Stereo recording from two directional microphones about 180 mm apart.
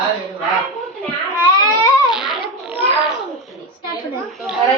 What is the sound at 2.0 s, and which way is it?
Babbling, centre (ahead or behind).